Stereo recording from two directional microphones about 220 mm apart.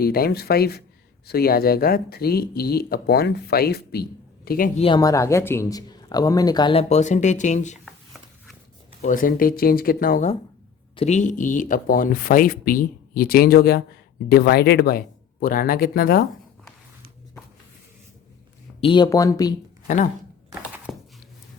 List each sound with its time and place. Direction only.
0.0 s speech: 45° left (ahead or behind)
4.8 s speech: 20° left (ahead or behind)
7.9 s a sound: centre (ahead or behind)
9.0 s speech: 35° left (ahead or behind)
18.8 s speech: 20° left (ahead or behind)
19.9 s speech: 30° left (ahead or behind)
20.9 s a sound: centre (ahead or behind)